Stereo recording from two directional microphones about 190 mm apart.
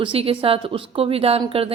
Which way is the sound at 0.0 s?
30° right (ahead or behind).